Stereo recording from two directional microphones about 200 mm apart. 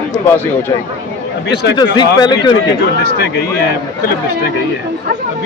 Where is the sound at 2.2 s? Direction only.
20° left (ahead or behind).